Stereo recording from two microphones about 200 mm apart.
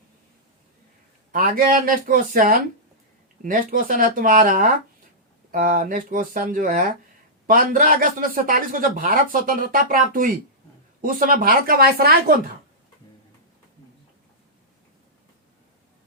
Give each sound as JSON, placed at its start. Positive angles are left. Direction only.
{"t": 1.3, "sound": "speech", "side_deg": -45}